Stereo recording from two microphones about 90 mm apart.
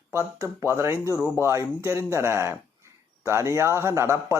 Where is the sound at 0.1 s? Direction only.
30° right (ahead or behind).